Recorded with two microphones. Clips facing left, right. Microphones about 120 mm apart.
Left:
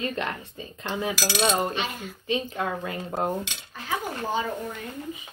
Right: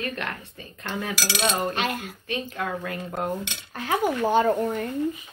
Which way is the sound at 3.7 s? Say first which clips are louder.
Right 7 dB; 65° right (ahead or behind).